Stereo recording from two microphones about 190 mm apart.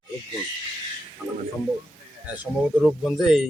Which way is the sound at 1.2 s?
5° right (ahead or behind).